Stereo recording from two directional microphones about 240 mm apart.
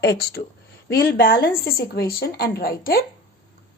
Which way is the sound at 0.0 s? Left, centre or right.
Left.